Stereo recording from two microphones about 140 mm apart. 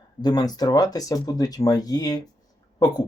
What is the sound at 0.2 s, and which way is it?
Speech, 30° left (ahead or behind).